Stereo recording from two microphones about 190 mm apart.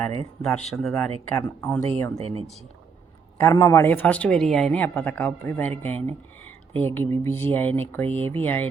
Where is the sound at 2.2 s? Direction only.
30° right (ahead or behind).